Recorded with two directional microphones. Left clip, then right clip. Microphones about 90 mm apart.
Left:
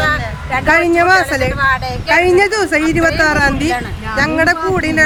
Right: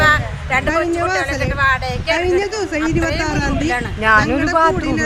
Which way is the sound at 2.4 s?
35° left (ahead or behind).